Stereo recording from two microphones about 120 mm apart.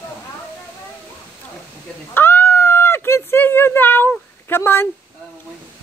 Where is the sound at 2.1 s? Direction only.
20° left (ahead or behind).